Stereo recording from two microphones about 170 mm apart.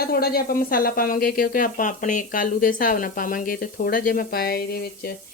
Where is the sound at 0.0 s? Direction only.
65° left (ahead or behind).